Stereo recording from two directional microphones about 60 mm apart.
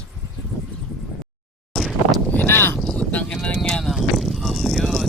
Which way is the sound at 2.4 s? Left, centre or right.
Left.